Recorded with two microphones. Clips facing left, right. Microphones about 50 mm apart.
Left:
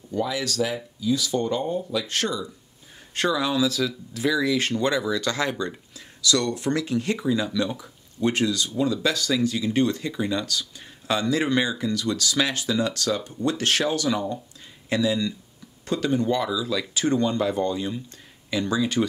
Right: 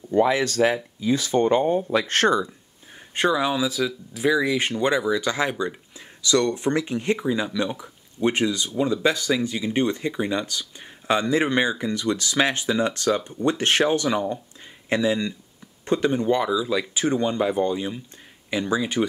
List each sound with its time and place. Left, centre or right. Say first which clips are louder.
0.1 s speech: right 7 dB; right
3.2 s speech: right 1 dB; right